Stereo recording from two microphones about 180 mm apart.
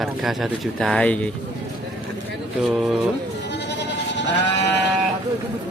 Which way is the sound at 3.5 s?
75° left (ahead or behind).